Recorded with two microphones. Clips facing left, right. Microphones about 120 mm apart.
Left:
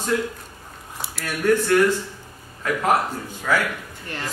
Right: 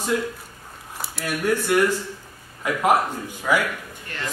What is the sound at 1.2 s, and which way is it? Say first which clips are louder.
A man's voice: left 3 dB; 10° right (ahead or behind).